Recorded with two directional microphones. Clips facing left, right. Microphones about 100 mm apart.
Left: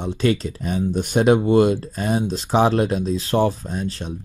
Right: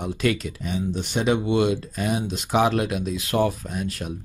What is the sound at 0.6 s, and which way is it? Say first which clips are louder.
Speech: left 5 dB; 45° left (ahead or behind).